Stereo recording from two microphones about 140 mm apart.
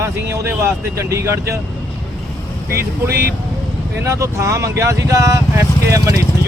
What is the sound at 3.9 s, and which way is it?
Speech, 20° right (ahead or behind).